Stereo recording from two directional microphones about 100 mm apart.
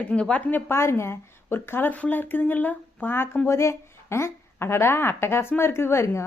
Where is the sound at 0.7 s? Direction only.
25° left (ahead or behind).